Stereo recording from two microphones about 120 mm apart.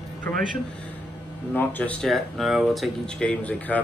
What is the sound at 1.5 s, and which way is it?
Speech, 15° left (ahead or behind).